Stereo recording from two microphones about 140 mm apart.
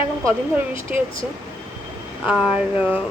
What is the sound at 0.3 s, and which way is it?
Speech, 15° right (ahead or behind).